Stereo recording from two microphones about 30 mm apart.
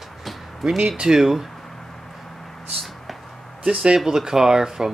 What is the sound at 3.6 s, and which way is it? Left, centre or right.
Speech, right.